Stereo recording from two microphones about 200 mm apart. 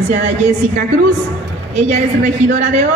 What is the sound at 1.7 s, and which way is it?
A woman's voice, 35° right (ahead or behind).